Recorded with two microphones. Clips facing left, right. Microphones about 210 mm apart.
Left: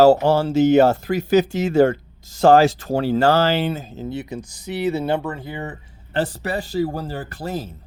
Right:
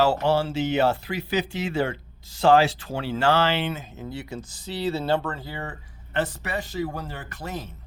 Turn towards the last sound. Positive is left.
turn(degrees=35)  # may be behind; listen again after turning